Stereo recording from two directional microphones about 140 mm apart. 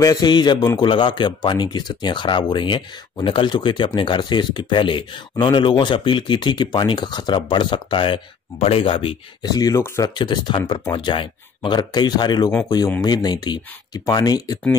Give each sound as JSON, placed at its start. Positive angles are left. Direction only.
{"t": 0.0, "sound": "a man's voice", "side_deg": 25}